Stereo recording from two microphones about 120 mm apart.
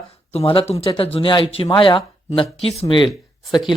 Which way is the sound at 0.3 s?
55° left (ahead or behind).